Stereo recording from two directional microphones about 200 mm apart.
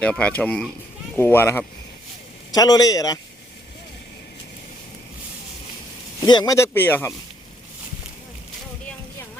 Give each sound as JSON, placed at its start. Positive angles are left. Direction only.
{"t": 0.0, "sound": "a man's voice", "side_deg": 5}
{"t": 6.1, "sound": "speech", "side_deg": 20}